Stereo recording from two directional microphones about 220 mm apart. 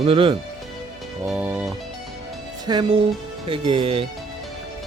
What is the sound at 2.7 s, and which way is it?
Speech, 20° right (ahead or behind).